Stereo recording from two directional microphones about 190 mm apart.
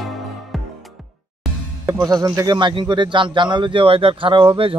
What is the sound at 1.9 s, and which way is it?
A man's voice, 20° right (ahead or behind).